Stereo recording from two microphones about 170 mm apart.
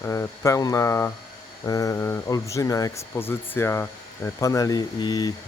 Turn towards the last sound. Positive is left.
turn(degrees=25)  # may be behind; listen again after turning